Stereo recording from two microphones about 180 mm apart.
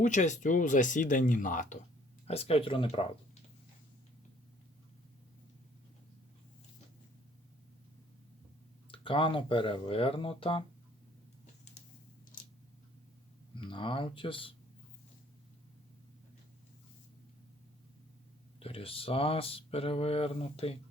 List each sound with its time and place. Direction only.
0.0 s speech: 45° left (ahead or behind)
2.2 s speech: 35° left (ahead or behind)
8.9 s speech: 30° left (ahead or behind)
13.6 s speech: 30° left (ahead or behind)
18.6 s speech: 30° left (ahead or behind)